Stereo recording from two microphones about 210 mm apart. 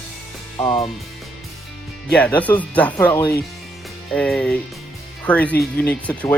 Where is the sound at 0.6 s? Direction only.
25° left (ahead or behind).